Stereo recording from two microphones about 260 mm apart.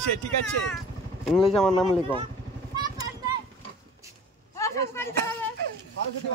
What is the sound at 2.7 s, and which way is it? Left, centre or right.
Vehicle, centre.